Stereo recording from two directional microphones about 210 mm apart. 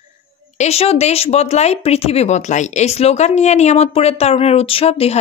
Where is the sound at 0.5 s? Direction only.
30° left (ahead or behind).